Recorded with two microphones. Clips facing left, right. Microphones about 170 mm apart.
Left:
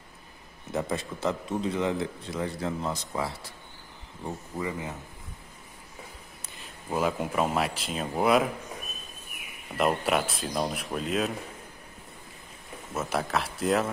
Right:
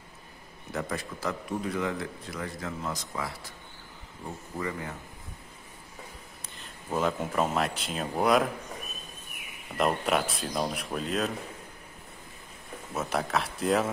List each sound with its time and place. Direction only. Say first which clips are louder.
0.7 s a man's voice: left 3 dB; 25° left (ahead or behind)
4.6 s speech: even; 15° left (ahead or behind)
6.9 s speech: left 1 dB; 10° left (ahead or behind)
9.8 s speech: left 1 dB; centre (ahead or behind)
12.9 s speech: even; centre (ahead or behind)